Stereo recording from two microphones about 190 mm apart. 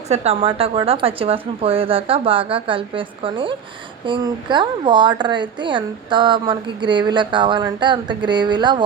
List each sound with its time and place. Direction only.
0.1 s a woman's voice: 30° right (ahead or behind)